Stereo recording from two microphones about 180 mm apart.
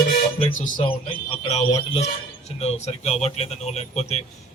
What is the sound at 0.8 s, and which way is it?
Speech, 30° left (ahead or behind).